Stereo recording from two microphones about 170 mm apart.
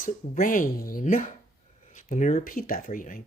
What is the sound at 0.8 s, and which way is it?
Speech, 55° left (ahead or behind).